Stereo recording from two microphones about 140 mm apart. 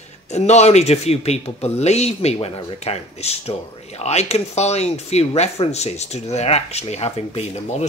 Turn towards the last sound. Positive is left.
turn(degrees=50)  # may be behind; listen again after turning